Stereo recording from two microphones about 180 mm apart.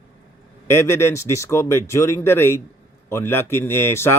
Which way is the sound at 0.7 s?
15° left (ahead or behind).